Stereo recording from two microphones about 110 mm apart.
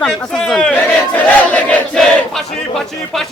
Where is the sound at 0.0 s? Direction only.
5° left (ahead or behind).